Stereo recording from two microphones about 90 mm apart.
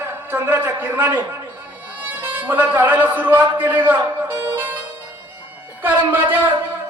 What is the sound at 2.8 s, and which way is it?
Speech, 20° right (ahead or behind).